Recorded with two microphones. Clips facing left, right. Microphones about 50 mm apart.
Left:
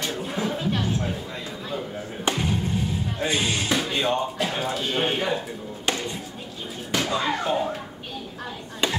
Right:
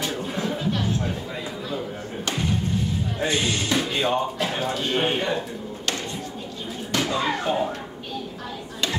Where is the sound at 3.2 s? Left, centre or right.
Centre.